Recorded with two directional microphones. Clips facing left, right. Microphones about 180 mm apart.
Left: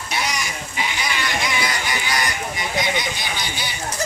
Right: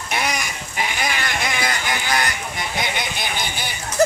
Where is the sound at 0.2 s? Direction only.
50° right (ahead or behind).